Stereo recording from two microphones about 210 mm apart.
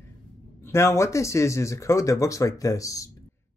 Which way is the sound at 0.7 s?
15° left (ahead or behind).